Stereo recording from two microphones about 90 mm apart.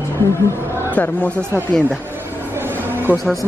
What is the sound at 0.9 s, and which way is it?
Speech, 20° left (ahead or behind).